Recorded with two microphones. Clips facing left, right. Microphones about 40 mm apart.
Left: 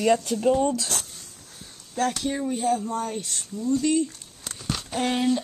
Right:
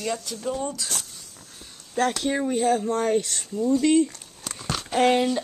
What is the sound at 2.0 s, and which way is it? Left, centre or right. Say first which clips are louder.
Speech: right 2 dB; right.